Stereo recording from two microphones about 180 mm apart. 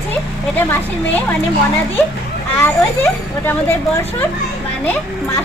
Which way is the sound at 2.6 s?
10° left (ahead or behind).